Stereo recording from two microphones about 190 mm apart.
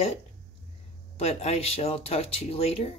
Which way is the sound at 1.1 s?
35° left (ahead or behind).